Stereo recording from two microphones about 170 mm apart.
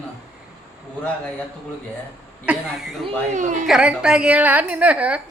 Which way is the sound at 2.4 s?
5° right (ahead or behind).